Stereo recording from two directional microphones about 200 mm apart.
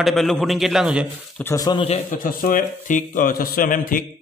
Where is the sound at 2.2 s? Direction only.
45° left (ahead or behind).